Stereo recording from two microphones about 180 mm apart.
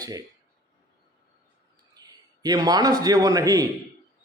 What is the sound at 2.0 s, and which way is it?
A man's voice, 20° right (ahead or behind).